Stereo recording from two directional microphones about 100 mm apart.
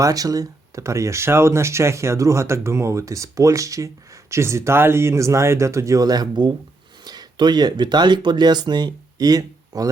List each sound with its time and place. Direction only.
0.0 s speech: 35° right (ahead or behind)